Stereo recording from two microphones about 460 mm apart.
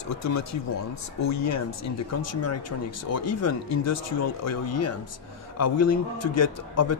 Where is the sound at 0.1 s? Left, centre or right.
Left.